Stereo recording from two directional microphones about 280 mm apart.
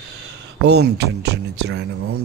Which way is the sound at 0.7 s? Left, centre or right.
Right.